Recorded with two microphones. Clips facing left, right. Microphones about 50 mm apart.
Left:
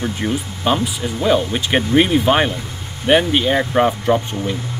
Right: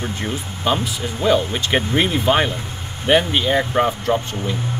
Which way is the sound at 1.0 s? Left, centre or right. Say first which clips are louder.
Even; centre.